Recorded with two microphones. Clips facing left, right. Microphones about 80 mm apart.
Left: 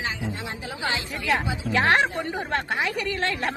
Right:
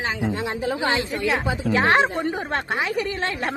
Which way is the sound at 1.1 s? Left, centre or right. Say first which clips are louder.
Right 2 dB; centre.